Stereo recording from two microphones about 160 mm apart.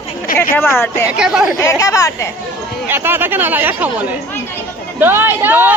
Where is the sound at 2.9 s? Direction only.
15° right (ahead or behind).